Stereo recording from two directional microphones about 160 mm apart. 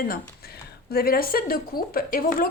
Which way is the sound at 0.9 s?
70° left (ahead or behind).